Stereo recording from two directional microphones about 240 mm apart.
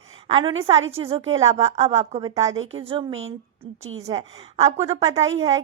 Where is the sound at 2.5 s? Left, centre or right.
Right.